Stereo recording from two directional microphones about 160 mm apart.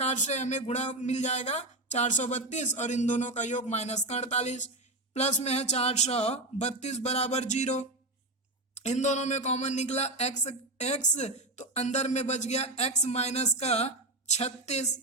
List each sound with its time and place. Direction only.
0.0 s speech: 45° left (ahead or behind)